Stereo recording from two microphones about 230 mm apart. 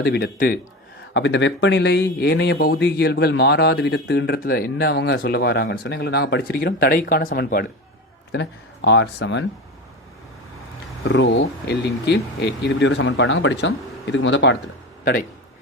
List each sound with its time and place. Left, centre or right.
0.0 s speech: left
1.1 s speech: left
11.1 s speech: left